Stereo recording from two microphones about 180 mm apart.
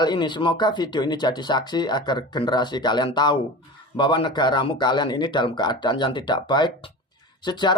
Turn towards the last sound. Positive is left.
turn(degrees=25)  # may be behind; listen again after turning